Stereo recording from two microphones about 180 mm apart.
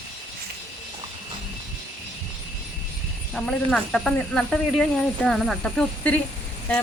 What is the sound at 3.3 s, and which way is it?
Speech, 5° left (ahead or behind).